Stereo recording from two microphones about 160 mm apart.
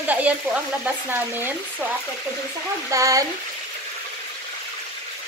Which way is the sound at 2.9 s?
20° right (ahead or behind).